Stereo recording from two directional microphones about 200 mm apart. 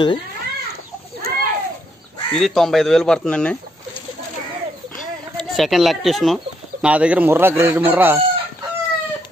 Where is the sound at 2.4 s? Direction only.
Centre (ahead or behind).